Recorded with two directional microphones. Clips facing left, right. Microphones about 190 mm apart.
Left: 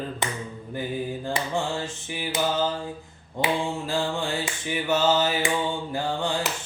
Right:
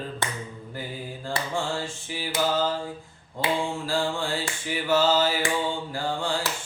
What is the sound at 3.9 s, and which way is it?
Mantra, 20° left (ahead or behind).